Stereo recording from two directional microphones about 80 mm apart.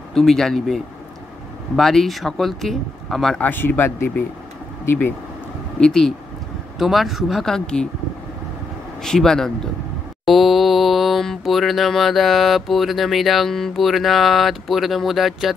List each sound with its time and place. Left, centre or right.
0.1 s mantra: centre
3.3 s speech: left
5.8 s speech: centre
6.8 s mantra: centre
9.0 s mantra: centre